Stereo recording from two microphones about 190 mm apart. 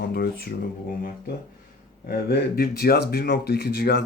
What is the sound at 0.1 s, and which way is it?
Speech, 55° left (ahead or behind).